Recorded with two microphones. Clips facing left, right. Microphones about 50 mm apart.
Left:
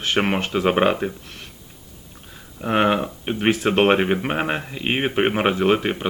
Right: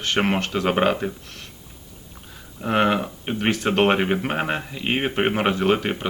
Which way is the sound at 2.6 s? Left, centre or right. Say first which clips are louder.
Left 1 dB; centre.